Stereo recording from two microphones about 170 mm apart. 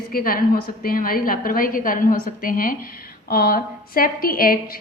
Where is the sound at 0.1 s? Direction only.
60° left (ahead or behind).